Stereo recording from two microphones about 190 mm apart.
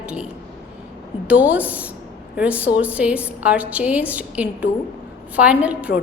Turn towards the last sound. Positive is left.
turn(degrees=-5)  # may be behind; listen again after turning